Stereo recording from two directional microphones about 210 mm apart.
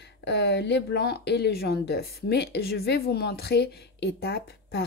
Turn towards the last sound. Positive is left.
turn(degrees=50)  # may be behind; listen again after turning